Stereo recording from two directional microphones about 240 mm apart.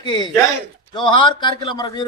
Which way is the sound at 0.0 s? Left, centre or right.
Centre.